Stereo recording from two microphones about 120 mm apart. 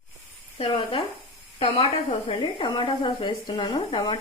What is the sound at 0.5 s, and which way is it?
A woman's voice, 50° left (ahead or behind).